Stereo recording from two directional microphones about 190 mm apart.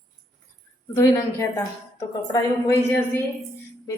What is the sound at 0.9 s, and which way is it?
A woman's voice, 15° left (ahead or behind).